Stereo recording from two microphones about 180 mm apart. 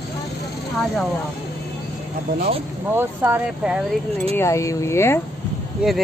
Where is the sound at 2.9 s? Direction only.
10° right (ahead or behind).